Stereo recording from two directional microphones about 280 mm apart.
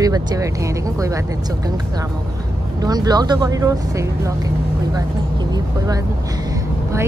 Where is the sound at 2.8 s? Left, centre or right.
Centre.